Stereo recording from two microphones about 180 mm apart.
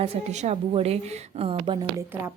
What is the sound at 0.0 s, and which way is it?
A woman's voice, 35° right (ahead or behind).